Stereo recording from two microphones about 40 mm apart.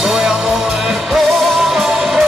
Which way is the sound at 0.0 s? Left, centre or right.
Centre.